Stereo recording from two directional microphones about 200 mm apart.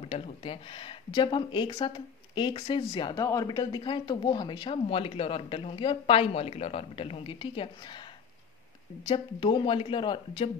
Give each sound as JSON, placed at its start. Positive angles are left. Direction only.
{"t": 0.1, "sound": "speech", "side_deg": 25}
{"t": 9.0, "sound": "speech", "side_deg": 25}